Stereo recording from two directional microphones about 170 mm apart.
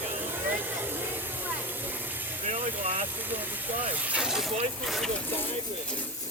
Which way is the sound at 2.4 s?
40° right (ahead or behind).